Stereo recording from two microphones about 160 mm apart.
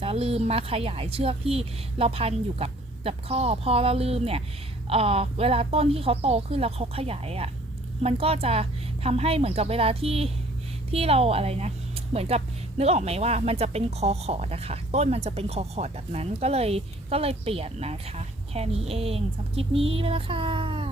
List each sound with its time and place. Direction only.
0.0 s speech: 40° right (ahead or behind)